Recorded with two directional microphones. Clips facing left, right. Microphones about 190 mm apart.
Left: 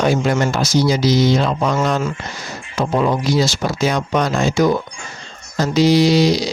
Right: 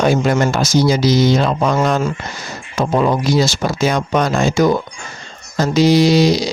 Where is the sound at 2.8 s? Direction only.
50° right (ahead or behind).